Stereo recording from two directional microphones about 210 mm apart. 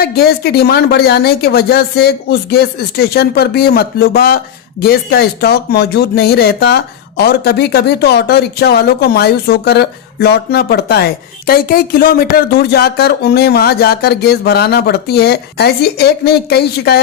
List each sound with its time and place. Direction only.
0.0 s speech: 45° left (ahead or behind)